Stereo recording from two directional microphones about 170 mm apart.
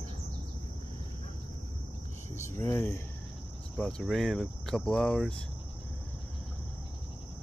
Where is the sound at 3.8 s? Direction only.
5° left (ahead or behind).